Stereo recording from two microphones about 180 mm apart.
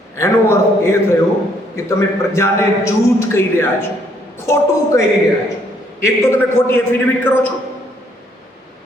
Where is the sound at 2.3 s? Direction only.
15° left (ahead or behind).